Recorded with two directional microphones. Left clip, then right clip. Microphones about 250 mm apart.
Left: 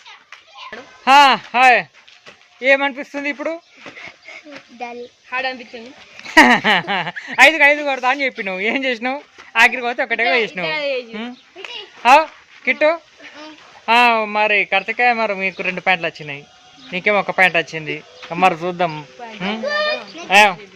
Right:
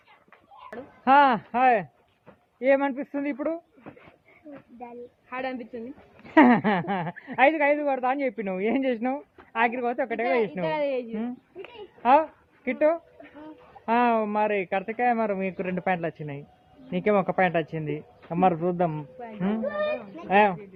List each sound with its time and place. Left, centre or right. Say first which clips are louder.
1.0 s speech: left 8 dB; centre
5.3 s a woman's voice: left 10 dB; right
6.3 s speech: left 9 dB; centre
10.7 s a woman's voice: left 6 dB; right
12.0 s a child's voice: left 9 dB; centre